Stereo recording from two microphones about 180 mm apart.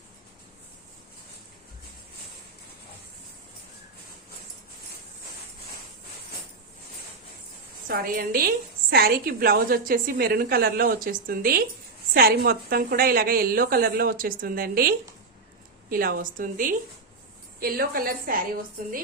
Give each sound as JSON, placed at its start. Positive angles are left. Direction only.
{"t": 7.9, "sound": "a woman's voice", "side_deg": -55}